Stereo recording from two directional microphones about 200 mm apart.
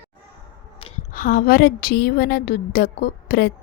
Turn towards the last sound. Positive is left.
turn(degrees=50)  # may be behind; listen again after turning